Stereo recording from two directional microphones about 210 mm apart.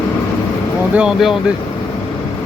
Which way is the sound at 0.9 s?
5° right (ahead or behind).